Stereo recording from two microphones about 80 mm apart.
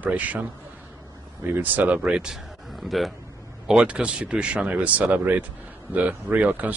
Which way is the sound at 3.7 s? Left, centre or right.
Centre.